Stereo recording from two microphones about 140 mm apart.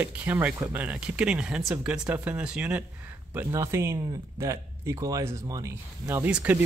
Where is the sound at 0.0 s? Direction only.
15° right (ahead or behind).